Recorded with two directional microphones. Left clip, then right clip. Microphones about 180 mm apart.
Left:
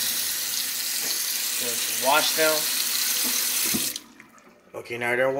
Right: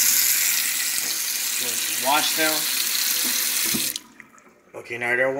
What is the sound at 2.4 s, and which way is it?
Water tap, 45° right (ahead or behind).